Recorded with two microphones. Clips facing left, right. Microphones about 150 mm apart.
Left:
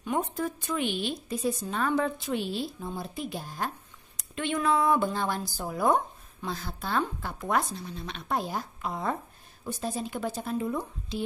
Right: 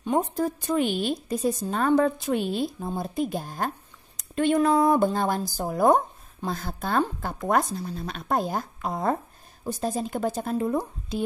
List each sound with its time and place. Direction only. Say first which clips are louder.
0.0 s speech: right 5 dB; 35° right (ahead or behind)